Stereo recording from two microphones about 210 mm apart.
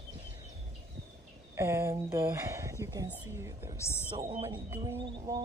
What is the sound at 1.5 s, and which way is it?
Speech, 10° right (ahead or behind).